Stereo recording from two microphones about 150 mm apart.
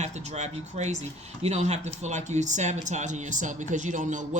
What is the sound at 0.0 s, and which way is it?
Speech, 50° right (ahead or behind).